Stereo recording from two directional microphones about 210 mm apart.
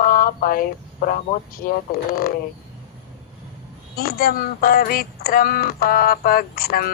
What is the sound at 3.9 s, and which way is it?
Speech, 45° left (ahead or behind).